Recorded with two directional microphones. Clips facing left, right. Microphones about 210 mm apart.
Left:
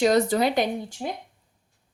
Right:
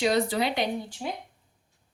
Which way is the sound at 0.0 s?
45° left (ahead or behind).